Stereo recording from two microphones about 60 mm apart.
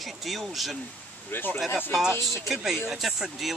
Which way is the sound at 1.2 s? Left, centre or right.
Left.